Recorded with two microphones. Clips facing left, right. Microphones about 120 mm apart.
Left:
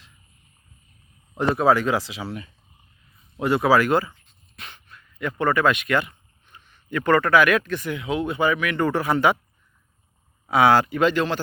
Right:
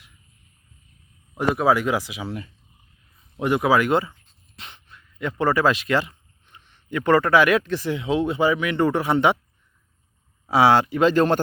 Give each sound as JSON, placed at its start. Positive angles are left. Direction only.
{"t": 1.4, "sound": "speech", "side_deg": -10}
{"t": 3.3, "sound": "speech", "side_deg": -15}
{"t": 10.5, "sound": "speech", "side_deg": -25}